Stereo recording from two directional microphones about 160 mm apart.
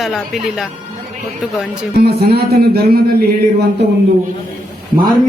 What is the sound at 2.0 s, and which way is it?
Speech, 75° right (ahead or behind).